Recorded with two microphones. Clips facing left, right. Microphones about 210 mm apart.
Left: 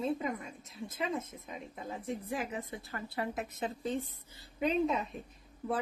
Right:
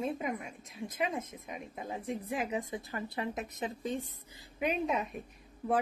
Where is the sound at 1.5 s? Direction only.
15° right (ahead or behind).